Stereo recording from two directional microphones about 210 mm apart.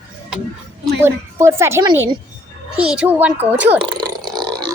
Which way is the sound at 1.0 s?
15° right (ahead or behind).